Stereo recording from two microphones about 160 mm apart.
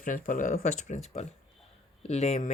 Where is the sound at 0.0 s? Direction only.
55° left (ahead or behind).